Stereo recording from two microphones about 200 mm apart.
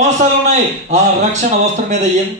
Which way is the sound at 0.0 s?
35° right (ahead or behind).